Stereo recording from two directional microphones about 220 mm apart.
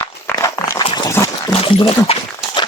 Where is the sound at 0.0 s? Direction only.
15° left (ahead or behind).